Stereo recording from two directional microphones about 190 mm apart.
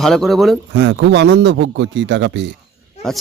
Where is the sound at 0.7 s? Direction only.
65° right (ahead or behind).